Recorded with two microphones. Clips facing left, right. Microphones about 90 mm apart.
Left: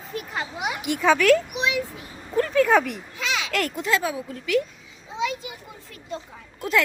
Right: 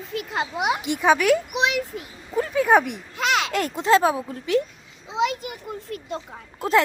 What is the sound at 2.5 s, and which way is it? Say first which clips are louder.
Speech: right 1 dB; 20° right (ahead or behind).